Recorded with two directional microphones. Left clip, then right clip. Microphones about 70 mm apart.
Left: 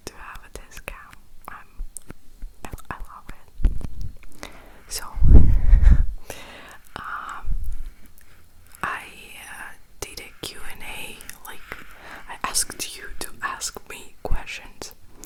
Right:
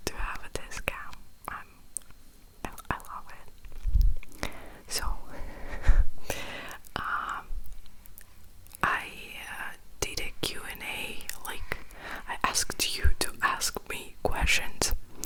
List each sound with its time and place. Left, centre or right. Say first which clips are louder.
0.0 s whispering: right 3 dB; right
1.5 s whispering: right 1 dB; centre
6.2 s whispering: right 7 dB; right
8.7 s whispering: right 1 dB; centre
14.3 s whispering: right 8 dB; right